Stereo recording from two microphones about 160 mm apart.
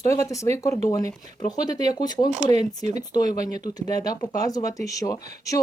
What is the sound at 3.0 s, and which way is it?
Speech, 25° left (ahead or behind).